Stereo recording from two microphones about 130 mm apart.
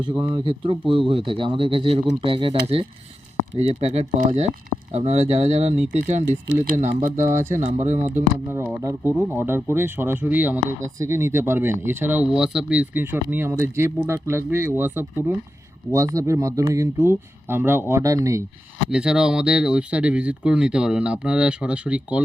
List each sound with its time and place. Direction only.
0.0 s speech: 35° right (ahead or behind); by 8.1 s 65° right (ahead or behind)
8.1 s speech: 20° right (ahead or behind)
18.9 s speech: 5° right (ahead or behind)